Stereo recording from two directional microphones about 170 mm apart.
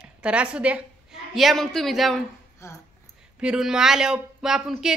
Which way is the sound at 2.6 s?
15° left (ahead or behind).